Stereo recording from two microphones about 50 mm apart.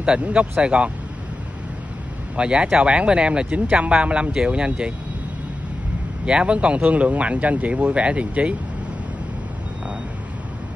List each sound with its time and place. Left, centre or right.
0.0 s speech: right
2.3 s speech: centre
6.2 s speech: right